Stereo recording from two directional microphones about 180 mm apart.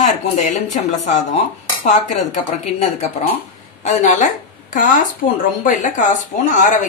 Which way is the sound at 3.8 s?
45° left (ahead or behind).